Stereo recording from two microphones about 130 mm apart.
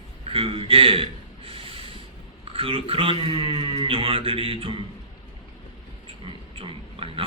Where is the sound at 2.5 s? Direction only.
45° right (ahead or behind).